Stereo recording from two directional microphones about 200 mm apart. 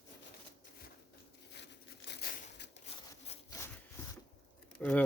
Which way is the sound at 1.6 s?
60° left (ahead or behind).